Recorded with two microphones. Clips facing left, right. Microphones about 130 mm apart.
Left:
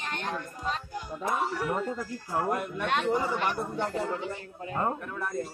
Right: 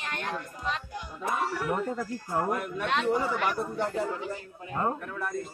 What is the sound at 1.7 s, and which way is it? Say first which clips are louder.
Speech: right 1 dB; 5° right (ahead or behind).